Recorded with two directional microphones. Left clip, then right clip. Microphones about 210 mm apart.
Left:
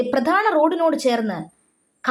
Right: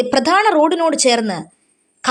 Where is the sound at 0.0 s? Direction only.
35° right (ahead or behind).